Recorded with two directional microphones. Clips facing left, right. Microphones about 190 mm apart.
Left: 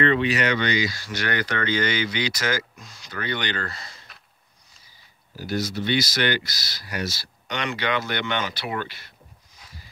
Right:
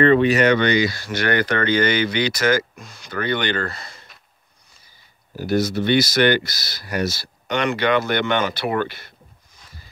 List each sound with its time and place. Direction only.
0.0 s speech: 45° right (ahead or behind)
5.3 s speech: 55° right (ahead or behind)